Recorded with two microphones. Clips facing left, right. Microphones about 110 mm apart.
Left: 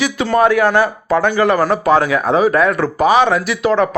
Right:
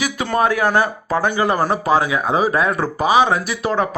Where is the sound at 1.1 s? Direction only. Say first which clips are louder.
Left 5 dB; 15° right (ahead or behind).